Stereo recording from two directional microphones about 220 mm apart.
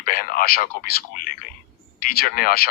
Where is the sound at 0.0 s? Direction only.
40° left (ahead or behind).